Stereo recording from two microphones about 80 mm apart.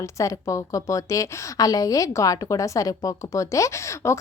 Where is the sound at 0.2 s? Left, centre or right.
Left.